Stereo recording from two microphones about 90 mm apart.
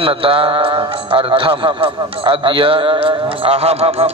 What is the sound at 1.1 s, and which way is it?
A man's voice, 85° right.